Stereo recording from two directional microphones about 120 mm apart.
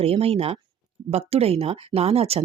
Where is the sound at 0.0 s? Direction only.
55° right (ahead or behind).